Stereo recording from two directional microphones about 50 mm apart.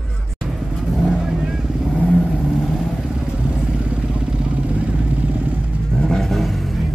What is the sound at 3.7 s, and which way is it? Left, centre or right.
Vehicle, right.